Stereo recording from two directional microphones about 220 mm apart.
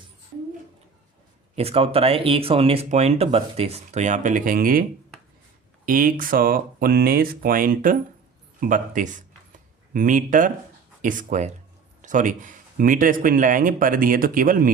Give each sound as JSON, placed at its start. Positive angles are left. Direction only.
{"t": 1.5, "sound": "a man's voice", "side_deg": -25}